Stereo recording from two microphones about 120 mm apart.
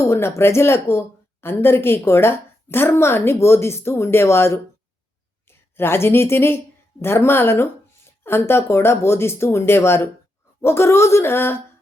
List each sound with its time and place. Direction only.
0.0 s a woman's voice: 20° left (ahead or behind)